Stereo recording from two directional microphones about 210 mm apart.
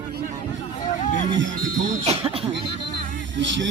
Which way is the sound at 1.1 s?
35° left (ahead or behind).